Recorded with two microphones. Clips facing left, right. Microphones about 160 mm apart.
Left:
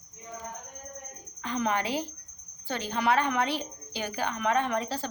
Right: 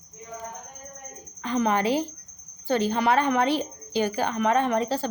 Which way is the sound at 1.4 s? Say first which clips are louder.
Right 5 dB; 40° right (ahead or behind).